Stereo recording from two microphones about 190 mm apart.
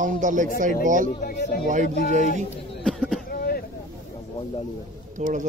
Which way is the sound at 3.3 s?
55° left (ahead or behind).